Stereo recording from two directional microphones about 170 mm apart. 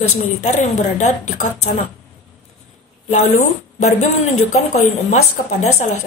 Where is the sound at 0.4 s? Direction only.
45° left (ahead or behind).